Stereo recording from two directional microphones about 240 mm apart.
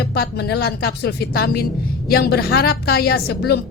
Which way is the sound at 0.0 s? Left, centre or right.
Left.